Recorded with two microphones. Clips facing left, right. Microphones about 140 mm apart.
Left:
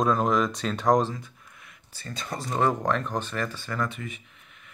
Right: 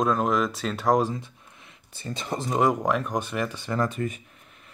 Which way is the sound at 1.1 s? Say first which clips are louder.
Right 4 dB; 25° right (ahead or behind).